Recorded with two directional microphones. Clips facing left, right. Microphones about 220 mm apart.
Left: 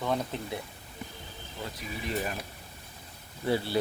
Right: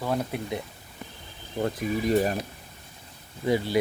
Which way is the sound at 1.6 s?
45° right (ahead or behind).